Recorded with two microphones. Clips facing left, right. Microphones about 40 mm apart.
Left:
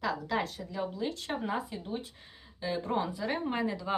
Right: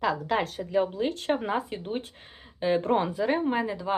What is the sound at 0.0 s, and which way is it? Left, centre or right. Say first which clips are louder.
A woman's voice: right 5 dB; right.